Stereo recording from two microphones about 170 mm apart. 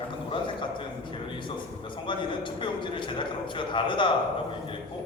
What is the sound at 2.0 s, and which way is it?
A man's voice, 30° left (ahead or behind).